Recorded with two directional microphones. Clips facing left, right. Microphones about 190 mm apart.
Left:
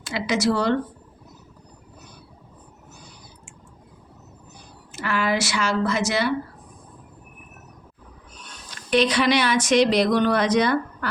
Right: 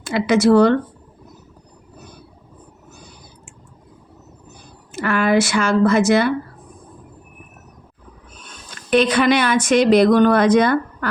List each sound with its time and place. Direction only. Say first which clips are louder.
0.0 s a woman's voice: right 7 dB; 55° right (ahead or behind)
4.9 s a woman's voice: right 6 dB; 55° right (ahead or behind)
8.4 s a woman's voice: right 5 dB; 55° right (ahead or behind)